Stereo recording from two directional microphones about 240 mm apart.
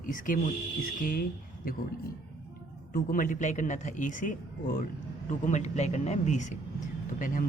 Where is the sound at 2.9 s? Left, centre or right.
Left.